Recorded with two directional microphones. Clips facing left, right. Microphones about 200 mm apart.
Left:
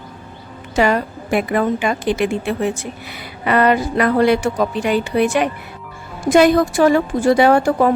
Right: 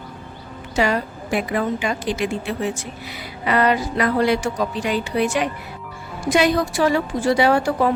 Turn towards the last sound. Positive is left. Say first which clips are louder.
# left 4 dB
turn(degrees=50)  # may be behind; listen again after turning